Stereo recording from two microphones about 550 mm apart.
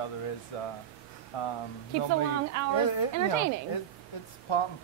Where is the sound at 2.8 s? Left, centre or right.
Left.